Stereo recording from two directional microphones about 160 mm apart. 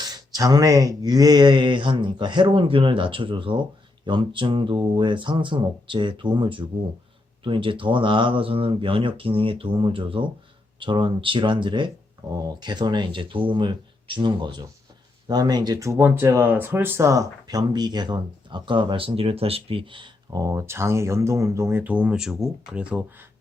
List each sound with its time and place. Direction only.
0.0 s speech: 25° right (ahead or behind); by 23.0 s 5° right (ahead or behind)